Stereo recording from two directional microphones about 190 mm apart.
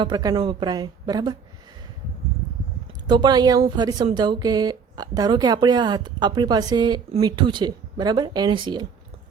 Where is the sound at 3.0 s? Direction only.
20° right (ahead or behind).